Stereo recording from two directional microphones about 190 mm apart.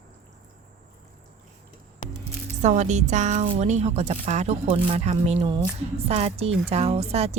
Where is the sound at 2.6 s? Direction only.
40° right (ahead or behind).